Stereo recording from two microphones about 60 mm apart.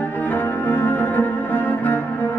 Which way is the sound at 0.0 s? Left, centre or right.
Left.